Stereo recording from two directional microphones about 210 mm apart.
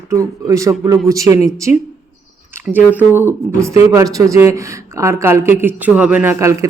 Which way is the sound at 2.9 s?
10° right (ahead or behind).